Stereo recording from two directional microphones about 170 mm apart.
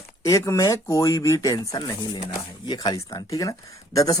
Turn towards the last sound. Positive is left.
turn(degrees=20)  # may be behind; listen again after turning